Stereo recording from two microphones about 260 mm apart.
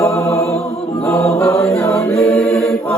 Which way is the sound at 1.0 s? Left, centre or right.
Centre.